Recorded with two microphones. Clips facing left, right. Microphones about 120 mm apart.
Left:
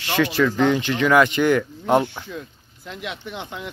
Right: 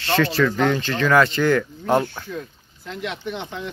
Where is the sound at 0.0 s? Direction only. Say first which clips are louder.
Even; 15° left (ahead or behind).